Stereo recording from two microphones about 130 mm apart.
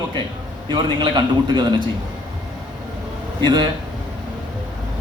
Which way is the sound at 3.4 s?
35° right (ahead or behind).